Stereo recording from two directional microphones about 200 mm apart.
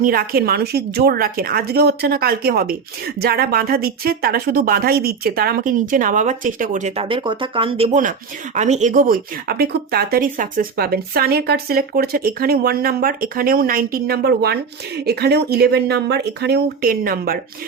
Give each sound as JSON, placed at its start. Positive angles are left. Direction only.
{"t": 0.0, "sound": "speech", "side_deg": -45}